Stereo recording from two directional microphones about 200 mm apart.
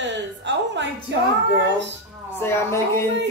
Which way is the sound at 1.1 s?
60° right (ahead or behind).